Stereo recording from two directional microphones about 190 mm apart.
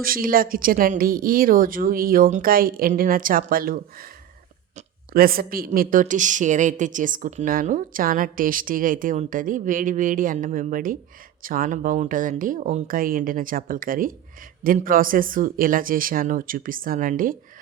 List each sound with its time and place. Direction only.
0.0 s a woman's voice: 50° right (ahead or behind)
5.1 s a woman's voice: 50° right (ahead or behind)